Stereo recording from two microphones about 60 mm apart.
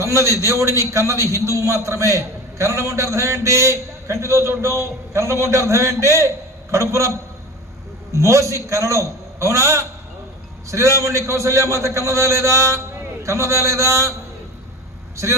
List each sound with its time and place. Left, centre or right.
0.0 s a man's voice: right
8.1 s a man's voice: right